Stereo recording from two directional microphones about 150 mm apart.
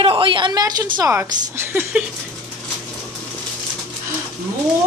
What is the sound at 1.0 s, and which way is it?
A woman's voice, 15° right (ahead or behind).